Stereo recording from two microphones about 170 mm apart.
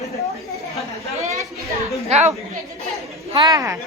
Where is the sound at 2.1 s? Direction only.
40° right (ahead or behind).